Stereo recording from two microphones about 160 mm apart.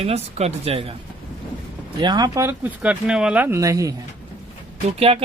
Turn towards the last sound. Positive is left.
turn(degrees=-40)  # may be behind; listen again after turning